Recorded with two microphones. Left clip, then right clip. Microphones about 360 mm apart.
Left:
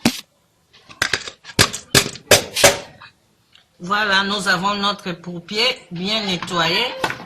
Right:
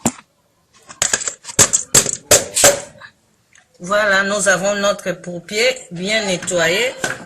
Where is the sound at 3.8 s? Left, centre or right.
Centre.